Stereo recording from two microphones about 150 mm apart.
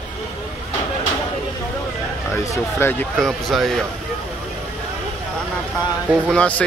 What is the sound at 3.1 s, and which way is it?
Speech, centre (ahead or behind).